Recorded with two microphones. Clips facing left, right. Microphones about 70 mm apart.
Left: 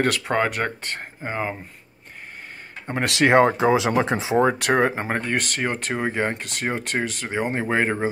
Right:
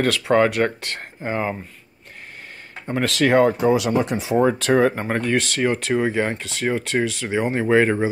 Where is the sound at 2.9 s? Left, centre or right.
Left.